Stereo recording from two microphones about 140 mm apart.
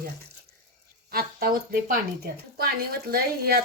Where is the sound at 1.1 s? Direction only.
90° right.